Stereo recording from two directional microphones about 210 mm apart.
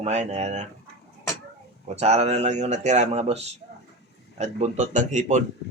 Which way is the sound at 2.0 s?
30° right (ahead or behind).